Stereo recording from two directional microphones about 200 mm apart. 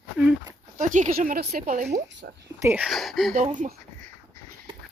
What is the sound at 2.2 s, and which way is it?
Speech, 50° right (ahead or behind).